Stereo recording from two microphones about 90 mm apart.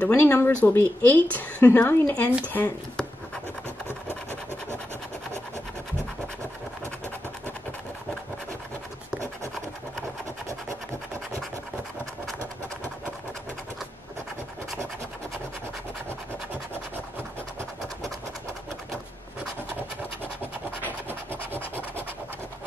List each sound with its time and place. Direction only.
0.0 s speech: 25° left (ahead or behind)